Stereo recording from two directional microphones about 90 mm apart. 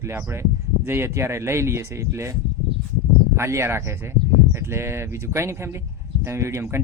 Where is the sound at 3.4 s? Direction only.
30° right (ahead or behind).